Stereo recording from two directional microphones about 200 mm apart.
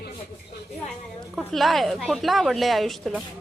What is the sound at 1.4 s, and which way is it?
A woman's voice, centre (ahead or behind).